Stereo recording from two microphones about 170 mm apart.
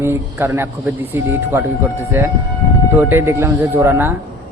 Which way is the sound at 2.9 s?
15° right (ahead or behind).